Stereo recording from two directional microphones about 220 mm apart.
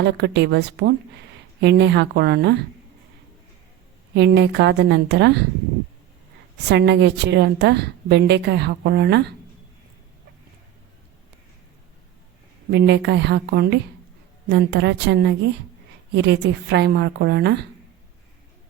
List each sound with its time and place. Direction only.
0.0 s a woman's voice: 50° right (ahead or behind)
4.1 s a woman's voice: 50° right (ahead or behind)
6.7 s a woman's voice: 50° right (ahead or behind)
12.7 s a woman's voice: 50° right (ahead or behind)